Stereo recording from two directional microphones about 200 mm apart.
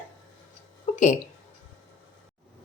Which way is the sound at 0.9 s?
35° left (ahead or behind).